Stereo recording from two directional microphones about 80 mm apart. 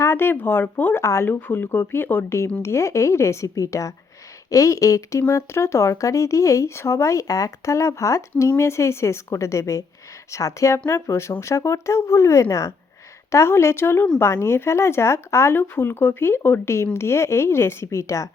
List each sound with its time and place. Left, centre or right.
0.0 s speech: left